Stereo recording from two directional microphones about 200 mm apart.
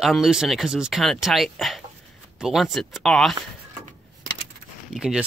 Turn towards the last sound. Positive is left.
turn(degrees=-5)  # may be behind; listen again after turning